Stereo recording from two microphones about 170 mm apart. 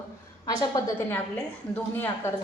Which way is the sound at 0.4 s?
20° left (ahead or behind).